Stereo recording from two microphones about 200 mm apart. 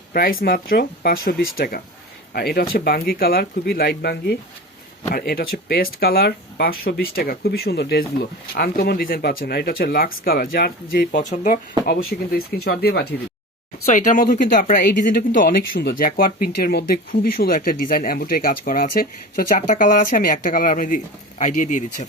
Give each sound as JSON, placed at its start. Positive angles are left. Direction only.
{"t": 0.1, "sound": "speech", "side_deg": 45}
{"t": 11.9, "sound": "speech", "side_deg": 50}
{"t": 13.8, "sound": "speech", "side_deg": 35}